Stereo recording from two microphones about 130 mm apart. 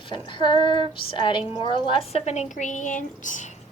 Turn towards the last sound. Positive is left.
turn(degrees=75)  # may be behind; listen again after turning